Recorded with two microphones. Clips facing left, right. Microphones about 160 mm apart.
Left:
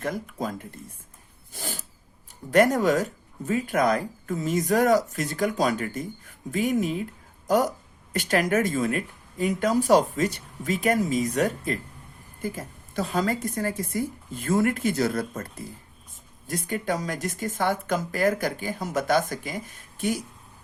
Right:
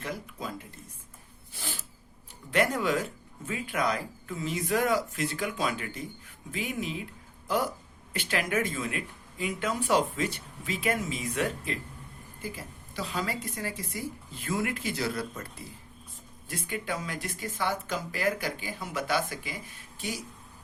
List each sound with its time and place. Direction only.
0.0 s speech: 45° left (ahead or behind)
1.5 s a sound: 45° left (ahead or behind)
2.5 s speech: 45° left (ahead or behind)